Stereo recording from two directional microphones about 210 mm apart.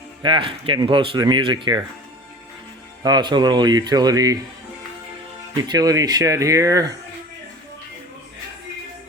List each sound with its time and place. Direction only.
0.2 s speech: 25° right (ahead or behind)
3.0 s speech: 20° right (ahead or behind)
5.6 s speech: 20° right (ahead or behind)